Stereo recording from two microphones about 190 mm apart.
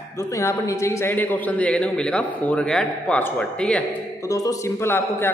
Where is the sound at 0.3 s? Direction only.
15° left (ahead or behind).